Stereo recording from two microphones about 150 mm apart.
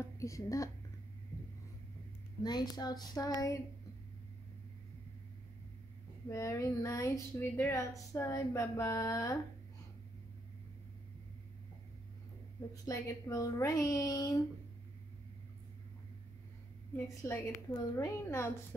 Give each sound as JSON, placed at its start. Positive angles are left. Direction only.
{"t": 0.0, "sound": "a woman's voice", "side_deg": 20}
{"t": 2.4, "sound": "a woman's voice", "side_deg": 25}
{"t": 6.2, "sound": "a woman's voice", "side_deg": 20}
{"t": 12.8, "sound": "a woman's voice", "side_deg": 25}
{"t": 16.9, "sound": "a woman's voice", "side_deg": 20}